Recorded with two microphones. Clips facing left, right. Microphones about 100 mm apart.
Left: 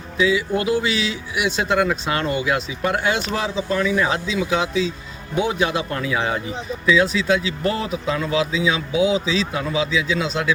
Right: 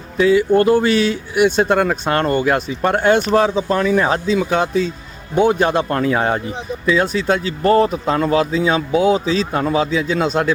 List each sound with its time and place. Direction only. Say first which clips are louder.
0.2 s a man's voice: right 7 dB; 50° right (ahead or behind)